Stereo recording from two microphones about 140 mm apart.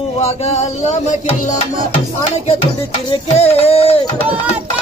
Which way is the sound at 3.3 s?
45° left (ahead or behind).